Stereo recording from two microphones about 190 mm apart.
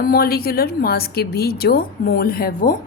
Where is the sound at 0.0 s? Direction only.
50° left (ahead or behind).